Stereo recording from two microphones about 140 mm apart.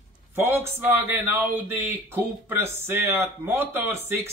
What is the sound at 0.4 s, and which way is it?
Speech, 15° right (ahead or behind).